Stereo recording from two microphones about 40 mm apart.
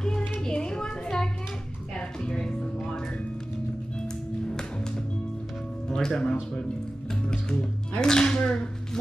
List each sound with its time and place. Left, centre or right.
0.5 s a sound: left
2.0 s music: left
4.5 s music: centre
5.9 s speech: centre
8.0 s speech: centre